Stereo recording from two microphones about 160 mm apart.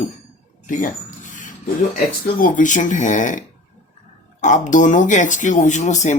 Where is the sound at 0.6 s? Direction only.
55° left (ahead or behind).